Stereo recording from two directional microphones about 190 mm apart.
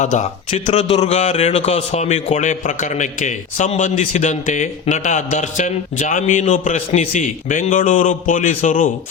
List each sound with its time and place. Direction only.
0.0 s a man's voice: 40° left (ahead or behind)